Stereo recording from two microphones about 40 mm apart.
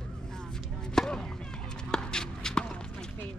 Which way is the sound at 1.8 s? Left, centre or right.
Centre.